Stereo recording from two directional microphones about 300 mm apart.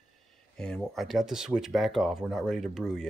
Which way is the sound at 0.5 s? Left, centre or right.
Centre.